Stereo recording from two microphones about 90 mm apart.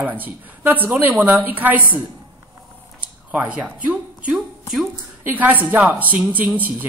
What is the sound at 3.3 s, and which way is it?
Speech, 15° right (ahead or behind).